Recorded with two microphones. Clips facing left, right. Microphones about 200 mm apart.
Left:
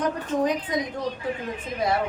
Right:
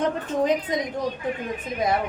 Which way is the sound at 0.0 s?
25° right (ahead or behind).